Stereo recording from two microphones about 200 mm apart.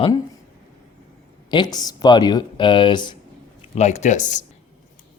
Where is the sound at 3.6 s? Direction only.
35° left (ahead or behind).